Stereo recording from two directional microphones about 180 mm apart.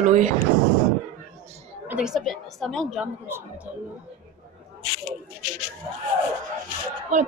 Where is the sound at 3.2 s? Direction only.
10° right (ahead or behind).